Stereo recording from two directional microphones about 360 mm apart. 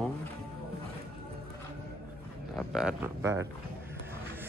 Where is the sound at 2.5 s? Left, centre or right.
Centre.